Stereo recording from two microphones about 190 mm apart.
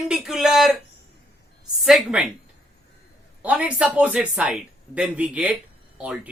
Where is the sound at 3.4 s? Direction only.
5° right (ahead or behind).